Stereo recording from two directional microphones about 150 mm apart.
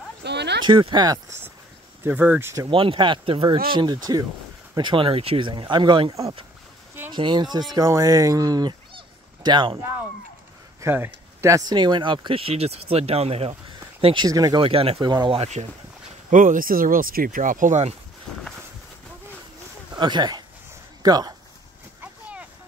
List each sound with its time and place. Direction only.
0.7 s speech: 30° right (ahead or behind)
2.0 s speech: 10° right (ahead or behind)
2.7 s speech: 35° right (ahead or behind)
9.8 s speech: 20° right (ahead or behind); by 13.6 s 40° right (ahead or behind)
14.0 s speech: 30° right (ahead or behind)
14.6 s speech: 40° right (ahead or behind)
16.3 s speech: 60° right (ahead or behind)
18.3 s a sound: 5° left (ahead or behind)
20.0 s speech: 30° right (ahead or behind)
22.0 s a sound: 10° right (ahead or behind)